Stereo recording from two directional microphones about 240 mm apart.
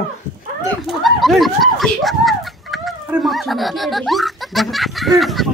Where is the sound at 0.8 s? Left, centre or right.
Centre.